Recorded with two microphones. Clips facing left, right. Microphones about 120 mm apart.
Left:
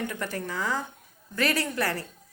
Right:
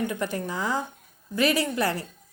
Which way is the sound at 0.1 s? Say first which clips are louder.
Right 3 dB; 20° right (ahead or behind).